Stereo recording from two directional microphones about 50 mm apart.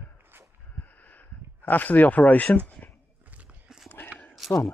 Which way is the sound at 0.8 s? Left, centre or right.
Left.